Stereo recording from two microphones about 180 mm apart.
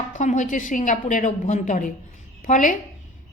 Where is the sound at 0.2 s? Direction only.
45° left (ahead or behind).